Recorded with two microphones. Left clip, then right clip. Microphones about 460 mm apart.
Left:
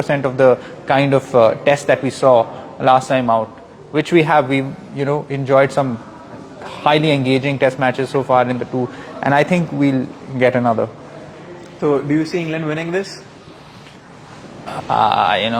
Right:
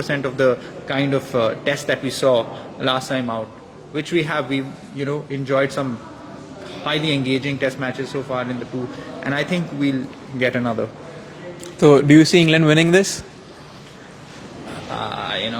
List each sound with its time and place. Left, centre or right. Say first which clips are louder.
0.0 s a man's voice: left 5 dB; centre
11.8 s speech: right 5 dB; right
14.9 s a man's voice: left 11 dB; left